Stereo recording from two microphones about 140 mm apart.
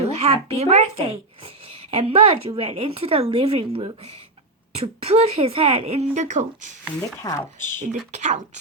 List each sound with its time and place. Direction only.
0.0 s speech: 45° right (ahead or behind)
7.2 s speech: 20° left (ahead or behind)
8.1 s speech: 55° right (ahead or behind)